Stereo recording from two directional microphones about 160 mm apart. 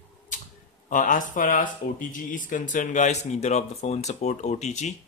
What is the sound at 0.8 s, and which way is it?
Speech, 55° left (ahead or behind).